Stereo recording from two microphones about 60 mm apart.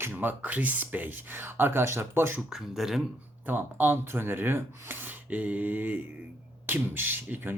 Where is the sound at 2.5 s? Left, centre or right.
Centre.